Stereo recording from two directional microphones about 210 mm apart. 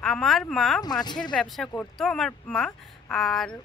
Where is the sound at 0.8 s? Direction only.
20° left (ahead or behind).